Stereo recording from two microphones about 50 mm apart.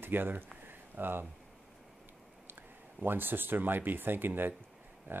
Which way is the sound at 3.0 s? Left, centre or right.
Right.